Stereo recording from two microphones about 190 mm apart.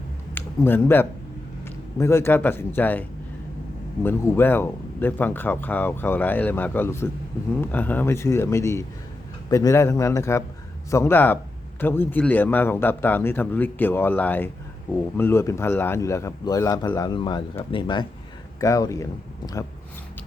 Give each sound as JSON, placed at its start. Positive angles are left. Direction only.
{"t": 0.3, "sound": "speech", "side_deg": 10}